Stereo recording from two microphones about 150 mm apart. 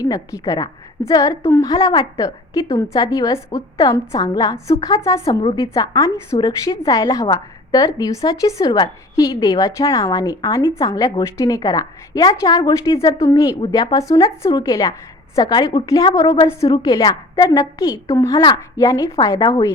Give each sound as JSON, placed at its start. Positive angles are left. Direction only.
{"t": 0.0, "sound": "a woman's voice", "side_deg": 20}
{"t": 5.4, "sound": "a woman's voice", "side_deg": 35}
{"t": 5.7, "sound": "a woman's voice", "side_deg": 20}